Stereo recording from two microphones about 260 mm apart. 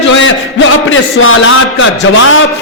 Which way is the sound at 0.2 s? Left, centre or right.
Left.